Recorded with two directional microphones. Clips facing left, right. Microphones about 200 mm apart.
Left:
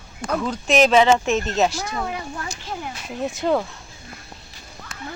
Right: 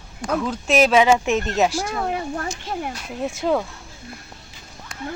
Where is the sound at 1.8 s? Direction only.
50° right (ahead or behind).